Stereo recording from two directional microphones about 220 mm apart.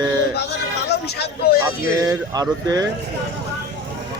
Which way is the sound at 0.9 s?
50° left (ahead or behind).